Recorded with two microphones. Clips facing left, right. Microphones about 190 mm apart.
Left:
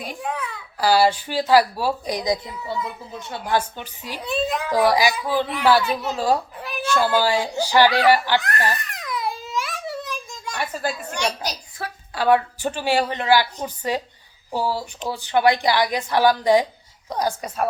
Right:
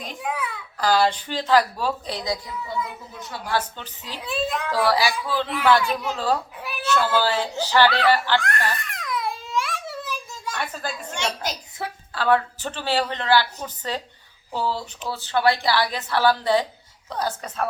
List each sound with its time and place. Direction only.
0.2 s a sound: 5° right (ahead or behind)
0.8 s a woman's voice: 10° left (ahead or behind)
3.2 s speech: 25° left (ahead or behind)
3.6 s a woman's voice: 10° left (ahead or behind)
4.2 s a woman's voice: centre (ahead or behind)
4.9 s a woman's voice: 15° left (ahead or behind)
5.5 s a woman's voice: 5° left (ahead or behind)
8.8 s a sound: centre (ahead or behind)
10.5 s a woman's voice: 10° left (ahead or behind)
11.5 s a woman's voice: 20° right (ahead or behind)
12.1 s a woman's voice: 15° left (ahead or behind)